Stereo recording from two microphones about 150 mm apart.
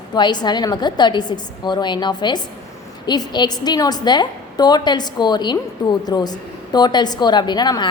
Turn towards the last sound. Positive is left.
turn(degrees=30)  # may be behind; listen again after turning